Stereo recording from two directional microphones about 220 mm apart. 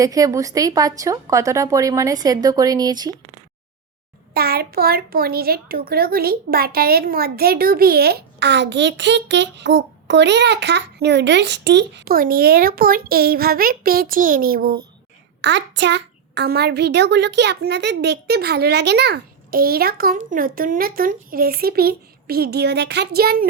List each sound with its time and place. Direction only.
0.0 s a woman's voice: 15° right (ahead or behind)
4.4 s a child's voice: 45° right (ahead or behind)
15.4 s a child's voice: 55° right (ahead or behind)